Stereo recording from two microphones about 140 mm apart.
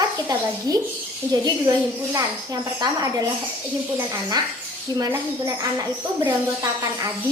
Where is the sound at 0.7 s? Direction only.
25° right (ahead or behind).